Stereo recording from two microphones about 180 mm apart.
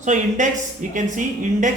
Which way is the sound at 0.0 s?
45° right (ahead or behind).